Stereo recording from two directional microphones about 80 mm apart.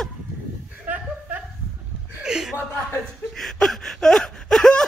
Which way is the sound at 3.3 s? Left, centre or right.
Centre.